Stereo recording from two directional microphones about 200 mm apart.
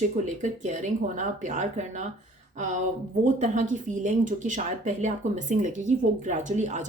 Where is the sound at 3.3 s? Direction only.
35° right (ahead or behind).